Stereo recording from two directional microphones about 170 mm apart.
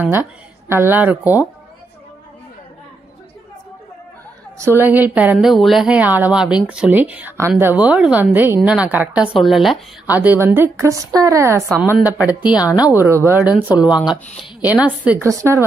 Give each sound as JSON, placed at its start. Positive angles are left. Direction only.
{"t": 0.7, "sound": "speech", "side_deg": -15}
{"t": 4.6, "sound": "speech", "side_deg": -15}
{"t": 12.5, "sound": "a woman's voice", "side_deg": 20}
{"t": 12.9, "sound": "speech", "side_deg": -15}
{"t": 14.4, "sound": "a woman's voice", "side_deg": 20}
{"t": 15.2, "sound": "speech", "side_deg": -20}